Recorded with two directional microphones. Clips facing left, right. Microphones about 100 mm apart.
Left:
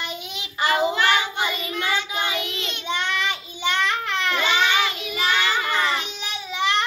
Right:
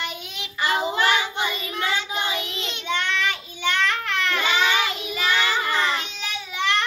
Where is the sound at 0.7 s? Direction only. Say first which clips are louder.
Left 2 dB; 30° right (ahead or behind).